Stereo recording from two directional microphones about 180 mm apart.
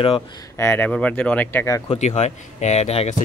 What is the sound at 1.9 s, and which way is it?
Speech, 40° left (ahead or behind).